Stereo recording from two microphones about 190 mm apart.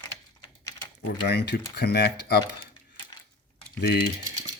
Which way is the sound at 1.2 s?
60° left (ahead or behind).